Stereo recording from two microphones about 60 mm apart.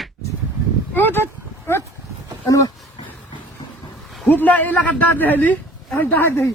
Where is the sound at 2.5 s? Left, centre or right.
Left.